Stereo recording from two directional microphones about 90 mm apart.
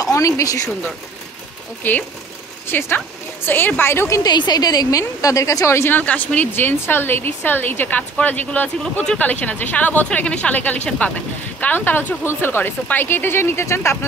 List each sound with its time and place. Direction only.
0.0 s speech: 40° left (ahead or behind)
1.8 s a woman's voice: 20° left (ahead or behind)
4.2 s speech: 50° left (ahead or behind); by 5.9 s 30° left (ahead or behind)
5.9 s a woman's voice: 20° left (ahead or behind)